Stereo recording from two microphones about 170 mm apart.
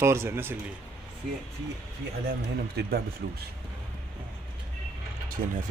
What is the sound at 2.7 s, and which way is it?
Speech, 75° right (ahead or behind).